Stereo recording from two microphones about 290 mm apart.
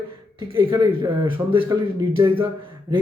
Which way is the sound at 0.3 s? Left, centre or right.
Centre.